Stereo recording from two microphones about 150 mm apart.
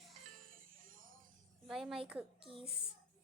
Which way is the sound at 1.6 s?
Centre (ahead or behind).